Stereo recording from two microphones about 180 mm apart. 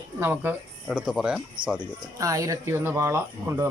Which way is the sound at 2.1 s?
20° right (ahead or behind).